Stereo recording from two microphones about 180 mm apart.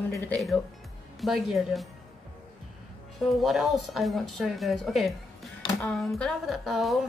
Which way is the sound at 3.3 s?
Centre (ahead or behind).